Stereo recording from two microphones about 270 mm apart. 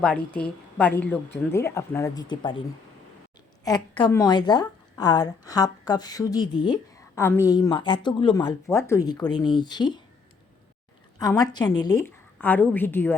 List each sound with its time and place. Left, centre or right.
0.3 s a woman's voice: centre
11.3 s speech: centre